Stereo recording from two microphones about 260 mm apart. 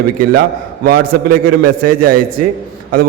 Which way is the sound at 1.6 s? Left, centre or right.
Right.